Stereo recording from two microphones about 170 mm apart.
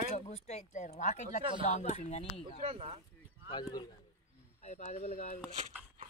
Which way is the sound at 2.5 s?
35° right (ahead or behind).